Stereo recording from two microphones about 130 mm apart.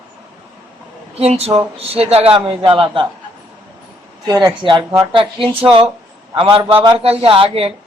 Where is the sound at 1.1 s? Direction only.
55° right (ahead or behind).